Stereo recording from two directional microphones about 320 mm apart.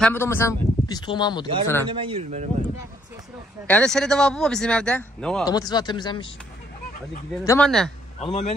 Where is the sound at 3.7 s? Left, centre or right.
Centre.